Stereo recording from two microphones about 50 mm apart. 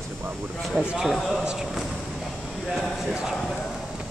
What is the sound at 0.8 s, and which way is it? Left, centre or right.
Speech, centre.